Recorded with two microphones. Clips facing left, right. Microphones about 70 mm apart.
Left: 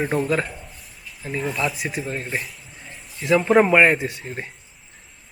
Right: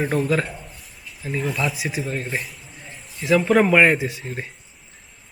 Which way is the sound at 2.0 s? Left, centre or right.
Left.